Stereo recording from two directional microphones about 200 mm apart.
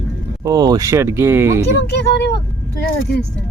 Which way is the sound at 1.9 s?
60° left (ahead or behind).